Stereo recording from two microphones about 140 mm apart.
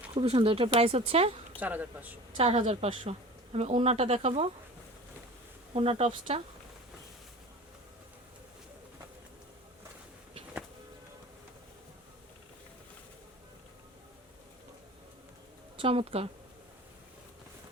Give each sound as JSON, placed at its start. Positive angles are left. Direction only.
{"t": 0.1, "sound": "a woman's voice", "side_deg": -40}
{"t": 1.5, "sound": "speech", "side_deg": -10}
{"t": 2.4, "sound": "a woman's voice", "side_deg": -45}
{"t": 5.7, "sound": "a woman's voice", "side_deg": -45}
{"t": 15.8, "sound": "a woman's voice", "side_deg": -40}